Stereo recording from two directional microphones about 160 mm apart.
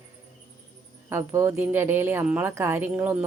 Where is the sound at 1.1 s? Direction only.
15° right (ahead or behind).